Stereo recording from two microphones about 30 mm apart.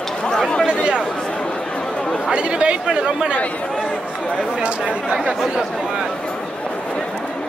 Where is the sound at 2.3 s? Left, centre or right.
Right.